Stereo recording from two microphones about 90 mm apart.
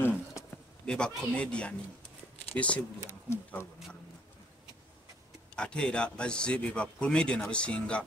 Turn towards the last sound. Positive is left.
turn(degrees=10)  # may be behind; listen again after turning